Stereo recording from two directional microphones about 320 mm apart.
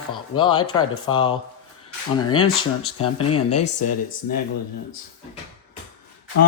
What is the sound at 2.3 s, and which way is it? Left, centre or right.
Speech, left.